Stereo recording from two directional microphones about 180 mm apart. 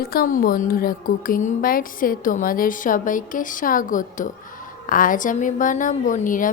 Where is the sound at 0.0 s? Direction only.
55° left (ahead or behind).